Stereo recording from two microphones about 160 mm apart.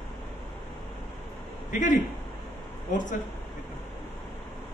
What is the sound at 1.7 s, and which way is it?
A man's voice, 55° left (ahead or behind).